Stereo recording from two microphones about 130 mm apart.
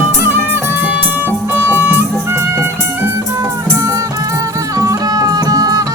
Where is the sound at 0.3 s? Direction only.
15° right (ahead or behind).